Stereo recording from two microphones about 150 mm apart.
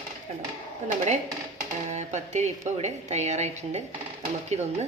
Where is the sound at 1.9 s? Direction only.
50° right (ahead or behind).